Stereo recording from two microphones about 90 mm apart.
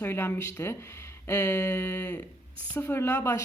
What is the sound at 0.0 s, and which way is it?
Speech, 25° left (ahead or behind).